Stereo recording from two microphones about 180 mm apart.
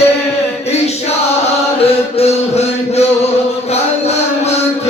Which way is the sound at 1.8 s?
35° left (ahead or behind).